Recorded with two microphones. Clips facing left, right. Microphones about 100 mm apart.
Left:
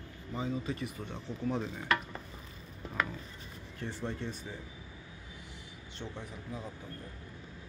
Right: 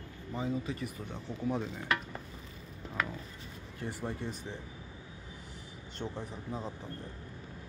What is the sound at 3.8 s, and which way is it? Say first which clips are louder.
Speech: even; 10° right (ahead or behind).